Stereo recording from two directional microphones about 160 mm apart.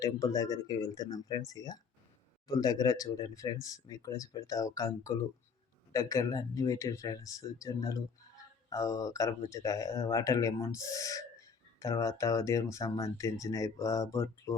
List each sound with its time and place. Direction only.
0.0 s speech: 20° left (ahead or behind)